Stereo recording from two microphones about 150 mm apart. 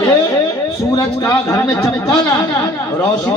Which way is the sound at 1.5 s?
15° left (ahead or behind).